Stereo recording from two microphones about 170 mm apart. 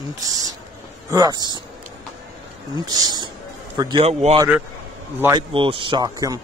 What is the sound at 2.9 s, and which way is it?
A man's voice, 25° right (ahead or behind).